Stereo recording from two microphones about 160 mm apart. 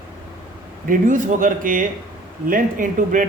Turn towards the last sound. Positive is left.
turn(degrees=-55)  # may be behind; listen again after turning